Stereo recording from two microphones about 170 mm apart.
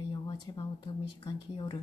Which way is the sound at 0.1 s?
30° left (ahead or behind).